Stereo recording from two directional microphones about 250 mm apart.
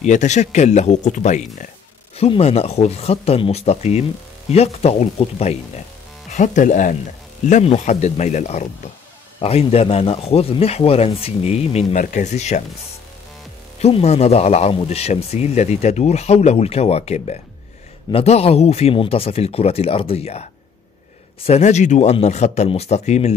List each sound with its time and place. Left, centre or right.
0.0 s speech: left
13.7 s speech: left